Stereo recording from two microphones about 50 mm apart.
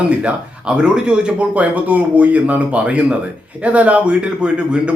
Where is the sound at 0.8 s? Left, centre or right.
Centre.